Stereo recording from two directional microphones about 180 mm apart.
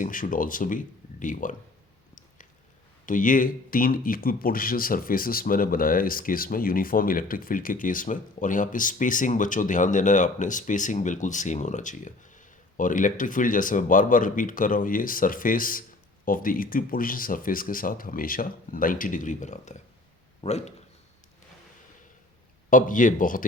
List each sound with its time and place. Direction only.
0.0 s speech: 50° left (ahead or behind)
3.1 s a man's voice: 50° left (ahead or behind)
22.7 s speech: 45° left (ahead or behind)